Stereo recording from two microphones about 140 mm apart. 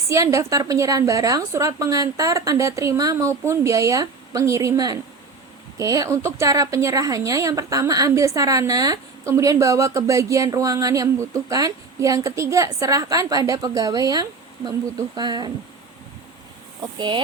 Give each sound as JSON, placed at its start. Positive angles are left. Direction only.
{"t": 0.1, "sound": "a woman's voice", "side_deg": -20}